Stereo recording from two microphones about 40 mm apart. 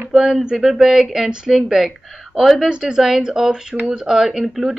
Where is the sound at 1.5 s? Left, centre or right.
Centre.